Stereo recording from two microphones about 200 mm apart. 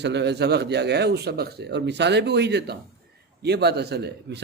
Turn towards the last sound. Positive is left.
turn(degrees=-55)  # may be behind; listen again after turning